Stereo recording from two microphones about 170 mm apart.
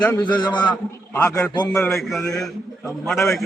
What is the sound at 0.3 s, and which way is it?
Speech, 25° left (ahead or behind).